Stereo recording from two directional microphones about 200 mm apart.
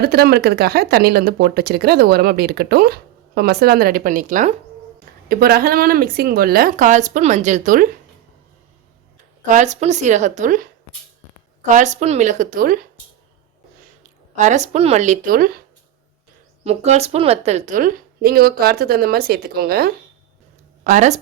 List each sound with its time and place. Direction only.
0.0 s speech: 55° right (ahead or behind)
5.3 s speech: 50° right (ahead or behind)
9.5 s speech: 35° right (ahead or behind)
14.3 s speech: 35° right (ahead or behind)
16.6 s speech: 35° right (ahead or behind); by 19.9 s 50° right (ahead or behind)
20.8 s speech: 35° right (ahead or behind)